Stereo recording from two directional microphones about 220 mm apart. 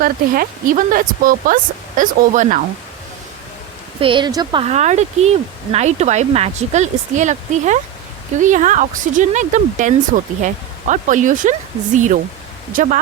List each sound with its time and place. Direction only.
0.0 s speech: 40° right (ahead or behind)
4.0 s speech: 20° right (ahead or behind)
12.7 s speech: 35° right (ahead or behind)